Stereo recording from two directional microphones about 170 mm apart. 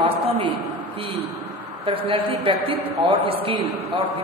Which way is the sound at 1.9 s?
30° right (ahead or behind).